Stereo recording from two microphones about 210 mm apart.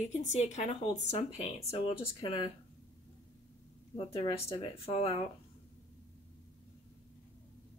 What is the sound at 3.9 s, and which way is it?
Speech, 25° left (ahead or behind).